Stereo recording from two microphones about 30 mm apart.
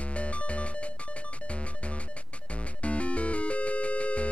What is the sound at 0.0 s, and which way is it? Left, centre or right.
Music, left.